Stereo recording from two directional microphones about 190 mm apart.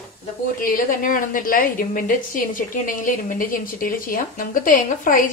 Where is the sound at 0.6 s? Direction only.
45° left (ahead or behind).